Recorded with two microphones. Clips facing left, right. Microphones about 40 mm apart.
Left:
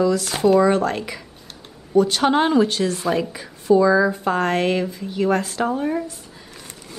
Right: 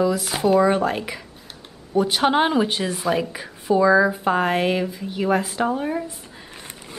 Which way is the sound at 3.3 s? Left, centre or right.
Centre.